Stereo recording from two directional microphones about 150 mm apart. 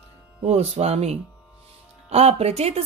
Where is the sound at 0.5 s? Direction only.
45° right (ahead or behind).